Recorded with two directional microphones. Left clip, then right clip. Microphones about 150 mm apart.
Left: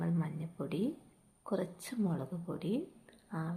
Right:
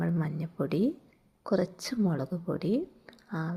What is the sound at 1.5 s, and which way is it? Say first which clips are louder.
Speech: right 8 dB; 40° right (ahead or behind).